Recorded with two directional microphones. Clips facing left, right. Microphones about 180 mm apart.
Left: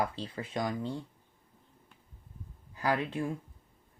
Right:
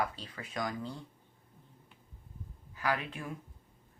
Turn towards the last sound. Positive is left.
turn(degrees=30)  # may be behind; listen again after turning